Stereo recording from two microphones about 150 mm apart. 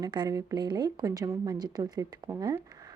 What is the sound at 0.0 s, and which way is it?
A woman's voice, 25° right (ahead or behind).